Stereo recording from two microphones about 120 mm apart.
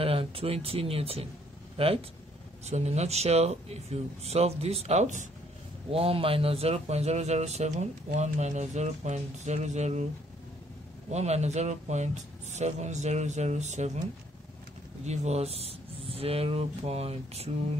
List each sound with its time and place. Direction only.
0.0 s speech: 50° right (ahead or behind)
2.6 s speech: 65° right (ahead or behind); by 5.3 s 85° right
5.9 s speech: 55° right (ahead or behind); by 10.0 s 70° right (ahead or behind)
11.1 s speech: 65° right (ahead or behind)
15.0 s speech: 65° right (ahead or behind)